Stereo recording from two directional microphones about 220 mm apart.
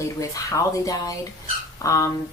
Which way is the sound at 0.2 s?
15° left (ahead or behind).